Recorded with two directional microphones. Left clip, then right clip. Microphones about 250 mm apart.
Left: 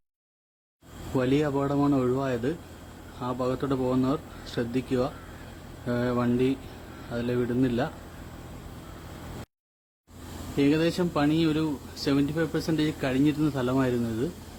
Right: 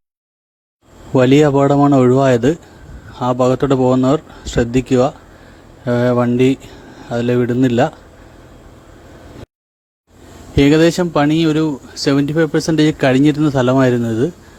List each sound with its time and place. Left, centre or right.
1.1 s speech: right
10.6 s speech: right